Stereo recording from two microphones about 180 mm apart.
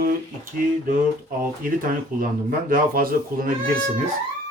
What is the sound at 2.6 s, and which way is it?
Speech, 50° right (ahead or behind).